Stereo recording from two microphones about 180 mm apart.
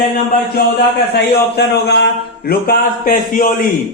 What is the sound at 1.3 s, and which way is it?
Speech, 65° left (ahead or behind).